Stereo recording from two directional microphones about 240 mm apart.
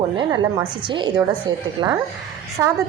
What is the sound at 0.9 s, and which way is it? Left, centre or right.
A woman's voice, centre.